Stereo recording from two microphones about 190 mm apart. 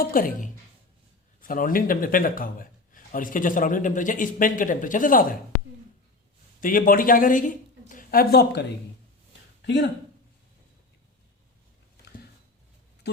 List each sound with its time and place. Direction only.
0.0 s a man's voice: 50° left (ahead or behind)
6.6 s a woman's voice: 45° left (ahead or behind)
9.6 s a sound: 65° left (ahead or behind)